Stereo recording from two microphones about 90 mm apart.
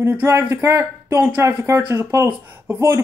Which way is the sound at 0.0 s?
20° right (ahead or behind).